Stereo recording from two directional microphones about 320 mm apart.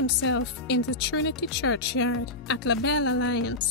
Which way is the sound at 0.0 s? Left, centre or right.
Left.